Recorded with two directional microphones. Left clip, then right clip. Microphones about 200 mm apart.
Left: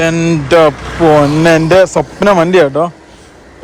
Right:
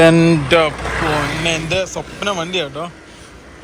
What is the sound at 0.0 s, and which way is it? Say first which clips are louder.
Speech: right 2 dB; 10° left (ahead or behind).